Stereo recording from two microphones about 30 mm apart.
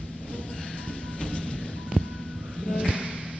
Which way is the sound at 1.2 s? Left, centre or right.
Left.